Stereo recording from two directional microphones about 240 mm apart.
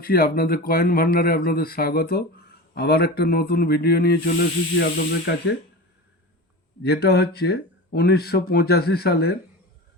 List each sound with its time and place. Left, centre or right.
0.0 s speech: left
6.8 s speech: left